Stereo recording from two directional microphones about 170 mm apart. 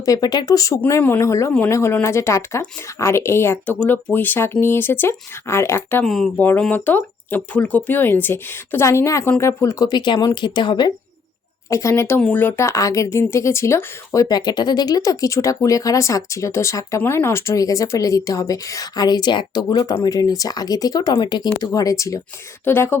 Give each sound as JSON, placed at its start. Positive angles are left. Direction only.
{"t": 0.0, "sound": "speech", "side_deg": 20}
{"t": 6.1, "sound": "speech", "side_deg": 0}